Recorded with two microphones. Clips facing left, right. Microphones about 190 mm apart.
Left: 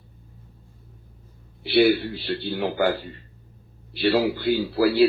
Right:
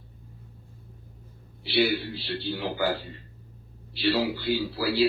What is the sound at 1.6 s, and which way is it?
A man's voice, 55° left (ahead or behind).